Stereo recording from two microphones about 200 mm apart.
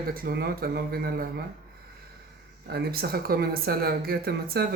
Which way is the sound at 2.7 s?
50° right (ahead or behind).